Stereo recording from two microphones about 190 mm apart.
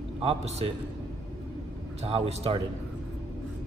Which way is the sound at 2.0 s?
35° right (ahead or behind).